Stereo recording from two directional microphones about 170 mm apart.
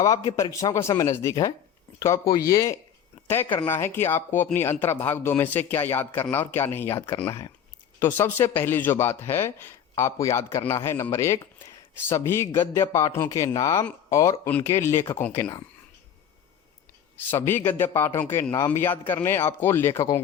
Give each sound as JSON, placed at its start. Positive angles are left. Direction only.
{"t": 0.0, "sound": "speech", "side_deg": 20}
{"t": 7.9, "sound": "speech", "side_deg": 15}
{"t": 17.2, "sound": "speech", "side_deg": 15}